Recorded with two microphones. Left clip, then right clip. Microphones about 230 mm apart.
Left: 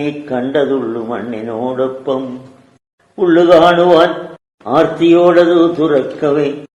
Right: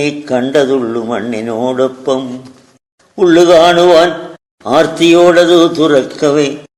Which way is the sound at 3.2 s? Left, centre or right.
Right.